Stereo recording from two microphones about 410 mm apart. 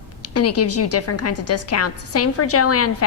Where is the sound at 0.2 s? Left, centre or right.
Left.